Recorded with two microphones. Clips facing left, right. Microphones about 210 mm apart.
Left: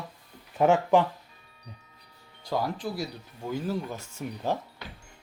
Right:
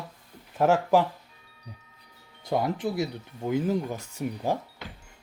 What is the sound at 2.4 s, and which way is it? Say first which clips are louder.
Speech: right 3 dB; 20° right (ahead or behind).